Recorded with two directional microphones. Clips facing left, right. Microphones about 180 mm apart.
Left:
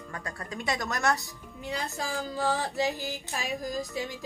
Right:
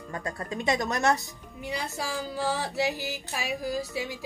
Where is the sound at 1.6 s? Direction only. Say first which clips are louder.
Right 1 dB; 10° right (ahead or behind).